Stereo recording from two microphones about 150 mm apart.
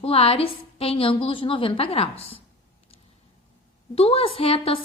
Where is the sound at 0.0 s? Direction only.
40° left (ahead or behind).